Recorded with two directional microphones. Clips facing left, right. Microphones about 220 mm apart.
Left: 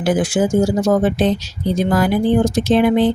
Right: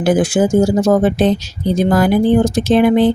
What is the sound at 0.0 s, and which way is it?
Speech, 40° right (ahead or behind).